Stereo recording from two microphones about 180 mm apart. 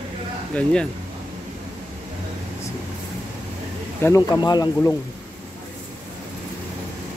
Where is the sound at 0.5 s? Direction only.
5° left (ahead or behind).